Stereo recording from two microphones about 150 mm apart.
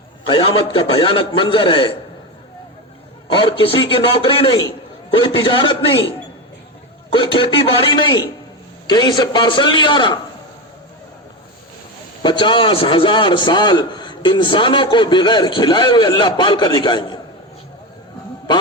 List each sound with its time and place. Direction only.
0.3 s a man's voice: 35° left (ahead or behind)
3.3 s a man's voice: 35° left (ahead or behind)
7.1 s a man's voice: 35° left (ahead or behind)
12.2 s a man's voice: 35° left (ahead or behind)